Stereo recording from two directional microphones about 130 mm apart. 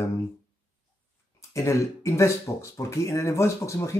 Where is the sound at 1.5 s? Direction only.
25° left (ahead or behind).